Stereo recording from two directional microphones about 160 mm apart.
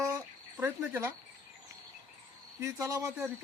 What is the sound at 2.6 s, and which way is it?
Speech, 20° right (ahead or behind).